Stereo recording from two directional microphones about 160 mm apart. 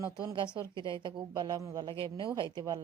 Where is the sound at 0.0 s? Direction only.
20° right (ahead or behind).